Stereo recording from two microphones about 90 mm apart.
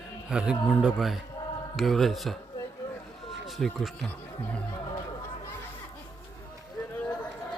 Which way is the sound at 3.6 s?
5° left (ahead or behind).